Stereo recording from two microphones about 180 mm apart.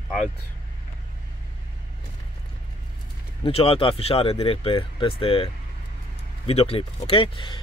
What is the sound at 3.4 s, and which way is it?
A man's voice, 30° left (ahead or behind).